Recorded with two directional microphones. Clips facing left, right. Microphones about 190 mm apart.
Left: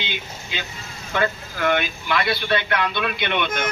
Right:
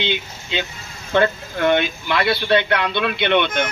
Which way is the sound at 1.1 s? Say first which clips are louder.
Right 6 dB; 25° right (ahead or behind).